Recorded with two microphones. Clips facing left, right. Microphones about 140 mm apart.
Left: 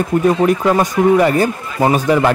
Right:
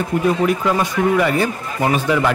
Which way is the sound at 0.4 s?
40° left (ahead or behind).